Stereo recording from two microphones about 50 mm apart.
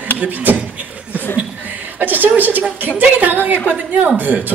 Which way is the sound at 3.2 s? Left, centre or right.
Right.